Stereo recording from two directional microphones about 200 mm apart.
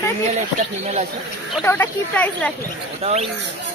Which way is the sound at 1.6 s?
10° left (ahead or behind).